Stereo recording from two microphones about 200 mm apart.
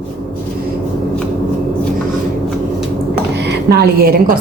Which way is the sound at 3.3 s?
55° right (ahead or behind).